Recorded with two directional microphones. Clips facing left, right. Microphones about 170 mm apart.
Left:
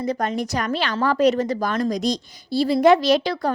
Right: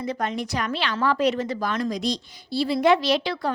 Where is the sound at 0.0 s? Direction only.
40° left (ahead or behind).